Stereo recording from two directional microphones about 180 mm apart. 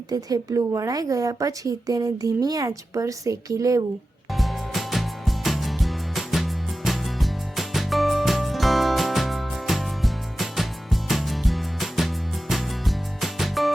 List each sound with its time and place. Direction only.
0.1 s a woman's voice: 20° right (ahead or behind)
4.3 s music: centre (ahead or behind)